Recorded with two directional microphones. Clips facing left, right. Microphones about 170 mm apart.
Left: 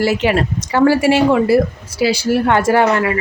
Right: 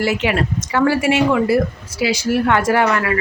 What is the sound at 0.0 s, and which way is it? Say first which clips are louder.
A woman's voice: left 3 dB; 35° left (ahead or behind).